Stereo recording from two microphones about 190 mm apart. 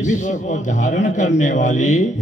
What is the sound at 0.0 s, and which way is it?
A man's voice, 40° left (ahead or behind).